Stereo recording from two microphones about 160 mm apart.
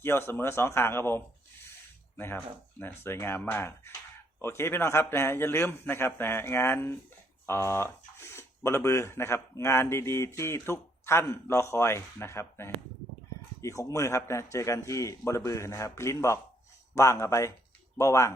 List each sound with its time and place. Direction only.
0.0 s speech: 15° left (ahead or behind)